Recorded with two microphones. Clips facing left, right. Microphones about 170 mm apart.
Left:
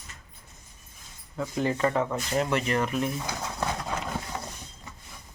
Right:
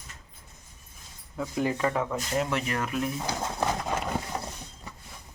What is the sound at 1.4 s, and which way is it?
Speech, 5° right (ahead or behind).